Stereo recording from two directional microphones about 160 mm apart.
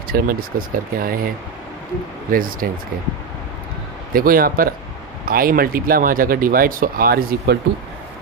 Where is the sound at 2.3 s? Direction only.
60° right (ahead or behind).